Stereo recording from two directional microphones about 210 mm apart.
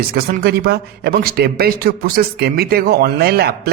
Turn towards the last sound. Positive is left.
turn(degrees=-50)  # may be behind; listen again after turning